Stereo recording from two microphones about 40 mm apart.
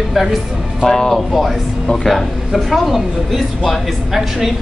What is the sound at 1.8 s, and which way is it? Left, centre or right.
Speech, centre.